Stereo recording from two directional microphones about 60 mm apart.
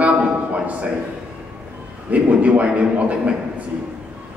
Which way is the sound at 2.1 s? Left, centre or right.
Right.